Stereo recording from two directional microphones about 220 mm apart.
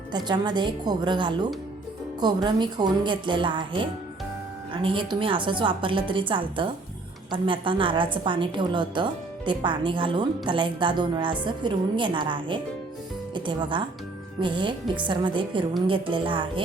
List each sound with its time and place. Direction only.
0.1 s a woman's voice: 20° right (ahead or behind)